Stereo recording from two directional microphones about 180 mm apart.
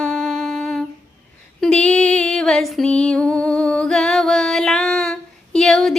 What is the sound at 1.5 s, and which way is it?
Female singing, 5° left (ahead or behind).